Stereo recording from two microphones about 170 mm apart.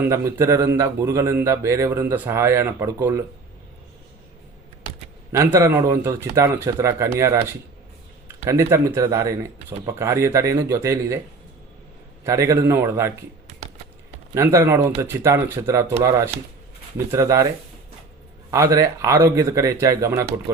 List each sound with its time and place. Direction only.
0.0 s speech: 15° right (ahead or behind)
5.3 s speech: 15° right (ahead or behind)
8.4 s speech: 15° right (ahead or behind)
12.2 s speech: 15° right (ahead or behind)
14.3 s speech: 15° right (ahead or behind)
18.5 s speech: 20° right (ahead or behind)